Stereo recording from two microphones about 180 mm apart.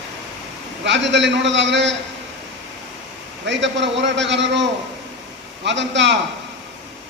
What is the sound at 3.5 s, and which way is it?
A man's voice, 85° right.